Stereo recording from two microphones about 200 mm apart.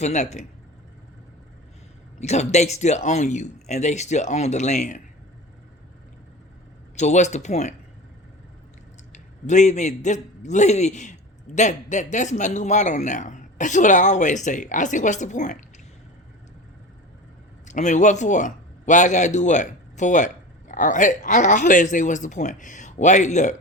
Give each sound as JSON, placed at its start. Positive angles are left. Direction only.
{"t": 0.0, "sound": "a man's voice", "side_deg": 35}
{"t": 2.1, "sound": "a man's voice", "side_deg": 35}
{"t": 6.9, "sound": "a man's voice", "side_deg": 35}
{"t": 9.1, "sound": "a man's voice", "side_deg": 35}
{"t": 17.7, "sound": "a man's voice", "side_deg": 35}